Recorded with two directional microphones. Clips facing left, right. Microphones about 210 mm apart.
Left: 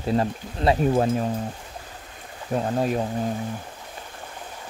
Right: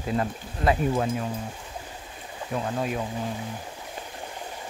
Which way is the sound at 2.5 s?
35° left (ahead or behind).